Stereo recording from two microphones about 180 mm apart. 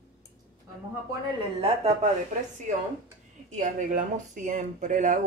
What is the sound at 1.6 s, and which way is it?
Speech, 35° right (ahead or behind).